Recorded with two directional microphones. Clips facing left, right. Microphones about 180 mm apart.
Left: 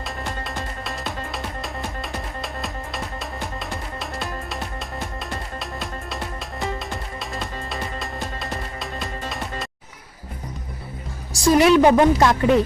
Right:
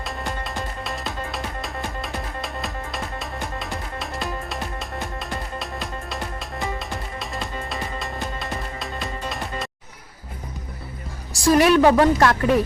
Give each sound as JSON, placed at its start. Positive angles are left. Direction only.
{"t": 0.0, "sound": "music", "side_deg": 0}
{"t": 11.4, "sound": "a woman's voice", "side_deg": 20}